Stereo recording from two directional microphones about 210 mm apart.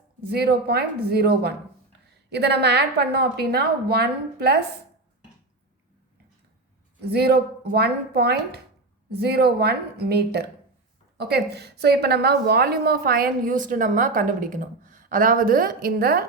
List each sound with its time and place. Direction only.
0.3 s a woman's voice: 50° right (ahead or behind)
7.1 s a woman's voice: 50° right (ahead or behind)